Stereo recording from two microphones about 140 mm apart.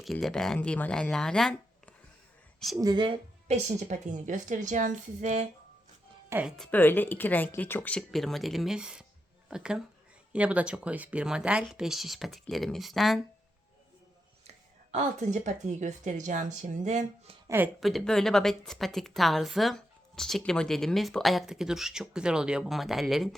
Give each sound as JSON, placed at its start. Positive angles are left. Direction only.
{"t": 0.0, "sound": "a woman's voice", "side_deg": 0}
{"t": 2.7, "sound": "speech", "side_deg": -30}
{"t": 3.5, "sound": "speech", "side_deg": -55}
{"t": 6.6, "sound": "a woman's voice", "side_deg": 15}
{"t": 14.9, "sound": "speech", "side_deg": -55}
{"t": 17.7, "sound": "a woman's voice", "side_deg": 0}